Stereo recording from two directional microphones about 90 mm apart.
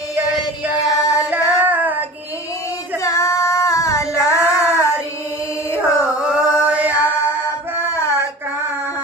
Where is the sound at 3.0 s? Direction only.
35° left (ahead or behind).